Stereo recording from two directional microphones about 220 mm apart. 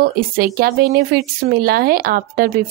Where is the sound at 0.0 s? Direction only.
40° right (ahead or behind).